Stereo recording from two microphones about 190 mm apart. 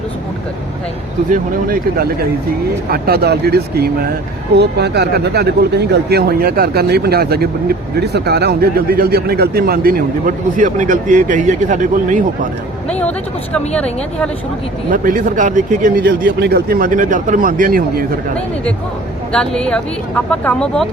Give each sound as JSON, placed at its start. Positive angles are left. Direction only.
{"t": 1.3, "sound": "speech", "side_deg": -50}
{"t": 12.9, "sound": "speech", "side_deg": 5}
{"t": 14.8, "sound": "speech", "side_deg": -45}
{"t": 16.0, "sound": "speech", "side_deg": -60}
{"t": 19.3, "sound": "speech", "side_deg": 5}